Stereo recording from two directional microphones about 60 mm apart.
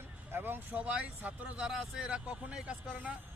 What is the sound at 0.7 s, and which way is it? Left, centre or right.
Speech, right.